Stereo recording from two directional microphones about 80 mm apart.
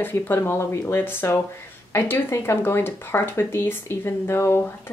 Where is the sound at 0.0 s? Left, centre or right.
Left.